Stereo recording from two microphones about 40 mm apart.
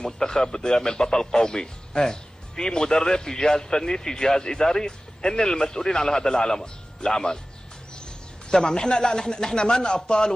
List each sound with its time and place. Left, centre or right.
0.0 s a man's voice: centre
8.5 s speech: centre